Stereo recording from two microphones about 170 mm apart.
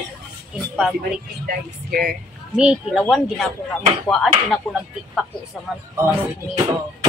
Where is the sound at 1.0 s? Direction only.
60° right (ahead or behind).